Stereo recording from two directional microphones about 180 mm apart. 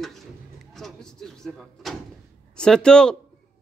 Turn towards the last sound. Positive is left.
turn(degrees=5)  # may be behind; listen again after turning